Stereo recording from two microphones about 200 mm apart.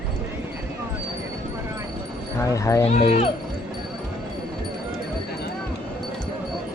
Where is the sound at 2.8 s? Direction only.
30° left (ahead or behind).